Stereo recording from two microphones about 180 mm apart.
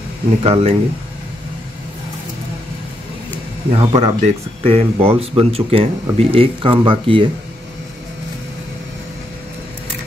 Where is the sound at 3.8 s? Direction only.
35° right (ahead or behind).